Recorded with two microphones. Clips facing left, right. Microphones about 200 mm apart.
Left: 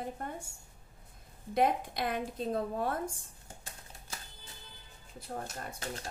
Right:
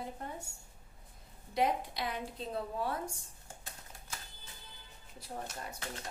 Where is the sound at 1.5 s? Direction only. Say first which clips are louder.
Left 3 dB; 50° left (ahead or behind).